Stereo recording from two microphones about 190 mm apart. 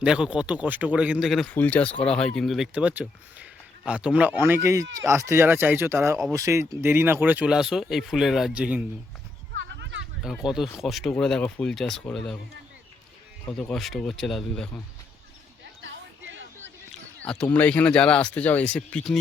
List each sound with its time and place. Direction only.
0.0 s speech: 5° right (ahead or behind)
9.6 s a sound: 65° right (ahead or behind)
10.4 s speech: centre (ahead or behind)
13.5 s speech: 5° left (ahead or behind)
15.8 s a sound: 75° right (ahead or behind)
16.9 s speech: 5° left (ahead or behind)